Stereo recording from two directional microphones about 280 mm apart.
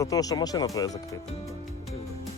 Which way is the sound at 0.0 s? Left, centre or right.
Centre.